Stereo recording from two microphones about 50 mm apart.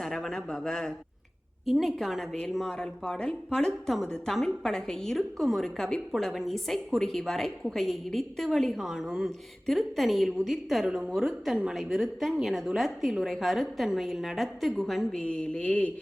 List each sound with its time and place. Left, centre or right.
0.0 s a woman's voice: centre
1.8 s a woman's voice: centre
2.7 s a woman's voice: centre
10.8 s a woman's voice: centre
15.1 s mantra: left